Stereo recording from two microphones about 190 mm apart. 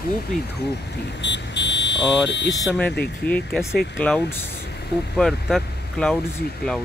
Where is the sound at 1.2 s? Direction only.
65° left (ahead or behind).